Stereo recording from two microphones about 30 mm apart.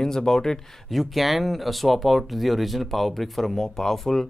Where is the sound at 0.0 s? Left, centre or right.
Centre.